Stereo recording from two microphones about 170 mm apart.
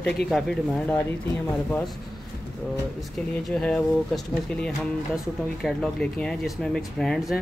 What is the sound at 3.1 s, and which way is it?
Speech, centre (ahead or behind).